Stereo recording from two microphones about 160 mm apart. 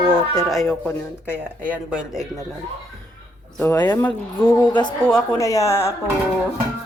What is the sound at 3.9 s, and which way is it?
Speech, 15° left (ahead or behind).